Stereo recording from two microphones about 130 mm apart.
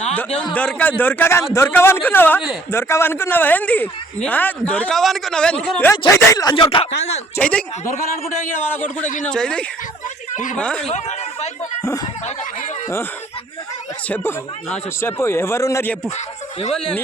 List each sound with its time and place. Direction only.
0.1 s a man's voice: 5° left (ahead or behind)
6.1 s speech: 30° left (ahead or behind)
7.3 s a man's voice: 10° left (ahead or behind)
9.2 s a man's voice: 5° left (ahead or behind)
10.8 s speech: 55° left (ahead or behind)
14.1 s speech: 15° left (ahead or behind)
16.7 s speech: 5° left (ahead or behind)